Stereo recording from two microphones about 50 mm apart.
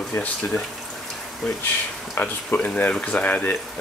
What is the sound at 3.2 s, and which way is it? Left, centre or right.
Speech, left.